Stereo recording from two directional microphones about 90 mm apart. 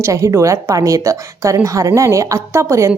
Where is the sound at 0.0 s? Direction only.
35° right (ahead or behind).